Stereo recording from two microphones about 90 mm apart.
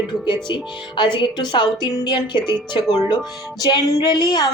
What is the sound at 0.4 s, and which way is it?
A woman's voice, 55° left (ahead or behind).